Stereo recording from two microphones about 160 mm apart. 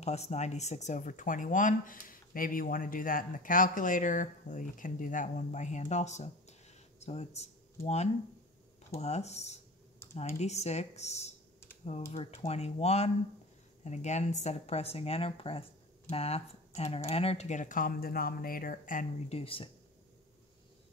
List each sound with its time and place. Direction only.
0.0 s speech: 40° left (ahead or behind)
19.2 s speech: 35° left (ahead or behind)